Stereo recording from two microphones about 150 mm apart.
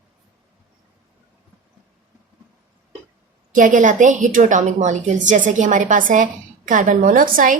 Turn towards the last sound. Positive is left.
turn(degrees=-65)  # may be behind; listen again after turning